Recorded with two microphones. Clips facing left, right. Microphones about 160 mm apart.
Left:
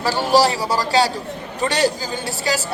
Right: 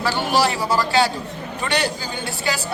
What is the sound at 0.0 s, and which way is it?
A woman's voice, 40° left (ahead or behind).